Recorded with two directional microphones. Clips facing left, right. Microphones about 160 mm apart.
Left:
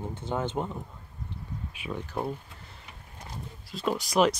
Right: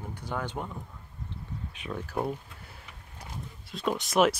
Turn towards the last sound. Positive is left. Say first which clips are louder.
# even
turn(degrees=0)  # may be behind; listen again after turning